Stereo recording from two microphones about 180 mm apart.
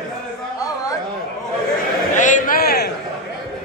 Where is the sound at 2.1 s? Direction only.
45° left (ahead or behind); by 2.9 s 60° left (ahead or behind).